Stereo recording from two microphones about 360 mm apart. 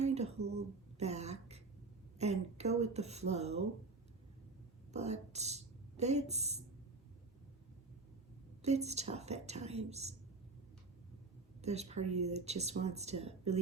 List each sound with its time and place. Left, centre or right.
0.0 s a sound: centre
4.9 s speech: centre
8.6 s speech: centre
11.6 s speech: centre